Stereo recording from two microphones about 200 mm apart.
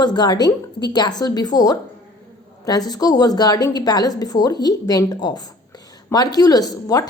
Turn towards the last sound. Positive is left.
turn(degrees=20)  # may be behind; listen again after turning